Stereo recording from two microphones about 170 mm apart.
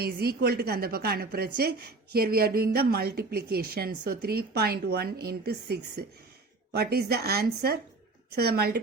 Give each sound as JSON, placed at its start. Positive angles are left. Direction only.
{"t": 0.0, "sound": "speech", "side_deg": -65}